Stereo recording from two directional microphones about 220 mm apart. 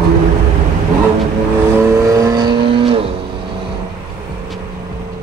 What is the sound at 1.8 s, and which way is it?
Vehicle, 15° right (ahead or behind).